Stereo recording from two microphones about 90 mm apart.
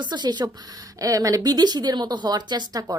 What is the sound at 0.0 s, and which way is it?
Speech, 55° right (ahead or behind).